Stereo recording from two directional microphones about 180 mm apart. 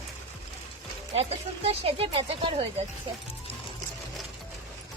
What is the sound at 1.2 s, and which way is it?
Speech, 35° right (ahead or behind).